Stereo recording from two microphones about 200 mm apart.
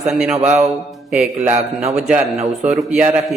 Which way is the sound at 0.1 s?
Centre (ahead or behind).